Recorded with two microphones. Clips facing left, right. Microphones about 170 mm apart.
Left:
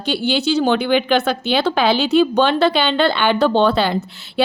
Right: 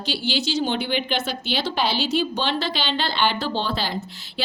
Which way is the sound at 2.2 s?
60° left (ahead or behind).